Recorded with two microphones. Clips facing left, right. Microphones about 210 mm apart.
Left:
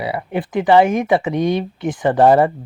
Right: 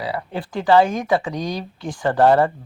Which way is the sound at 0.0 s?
20° left (ahead or behind).